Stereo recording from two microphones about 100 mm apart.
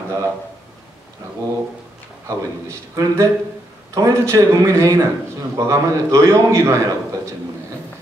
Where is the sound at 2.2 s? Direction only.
30° right (ahead or behind).